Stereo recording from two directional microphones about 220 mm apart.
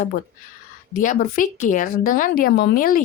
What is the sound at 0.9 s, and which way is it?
A woman's voice, 35° left (ahead or behind).